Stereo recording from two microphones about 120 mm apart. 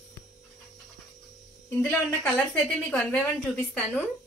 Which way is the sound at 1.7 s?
15° left (ahead or behind).